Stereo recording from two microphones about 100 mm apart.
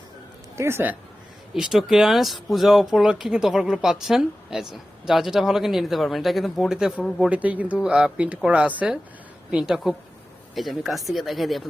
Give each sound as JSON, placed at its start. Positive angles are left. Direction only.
{"t": 0.5, "sound": "speech", "side_deg": -25}
{"t": 1.5, "sound": "speech", "side_deg": -5}